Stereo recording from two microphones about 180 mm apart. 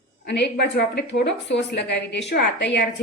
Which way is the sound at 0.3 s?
70° left (ahead or behind).